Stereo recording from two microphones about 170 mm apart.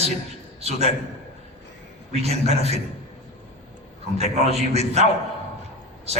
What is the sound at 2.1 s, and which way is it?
Speech, 40° right (ahead or behind).